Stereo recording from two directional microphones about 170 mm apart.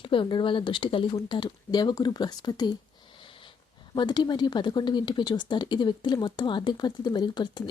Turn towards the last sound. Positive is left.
turn(degrees=25)  # may be behind; listen again after turning